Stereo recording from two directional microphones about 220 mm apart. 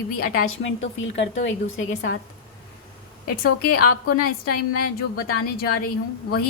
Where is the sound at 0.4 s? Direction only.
60° left (ahead or behind).